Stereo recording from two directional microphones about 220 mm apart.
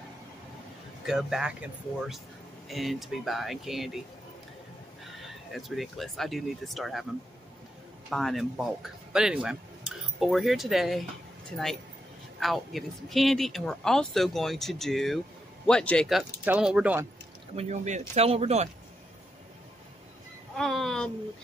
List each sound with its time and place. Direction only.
1.0 s speech: centre (ahead or behind)
5.5 s speech: centre (ahead or behind)
8.1 s speech: centre (ahead or behind)
12.4 s speech: centre (ahead or behind)
17.6 s speech: 30° right (ahead or behind)
20.5 s speech: centre (ahead or behind)